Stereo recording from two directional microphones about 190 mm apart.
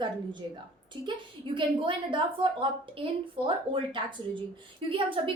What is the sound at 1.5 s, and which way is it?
A woman's voice, 25° right (ahead or behind).